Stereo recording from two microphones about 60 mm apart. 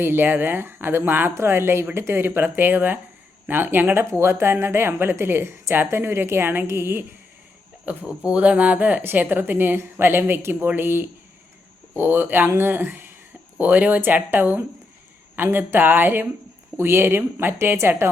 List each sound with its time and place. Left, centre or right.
0.0 s speech: right
4.2 s speech: right
8.0 s speech: right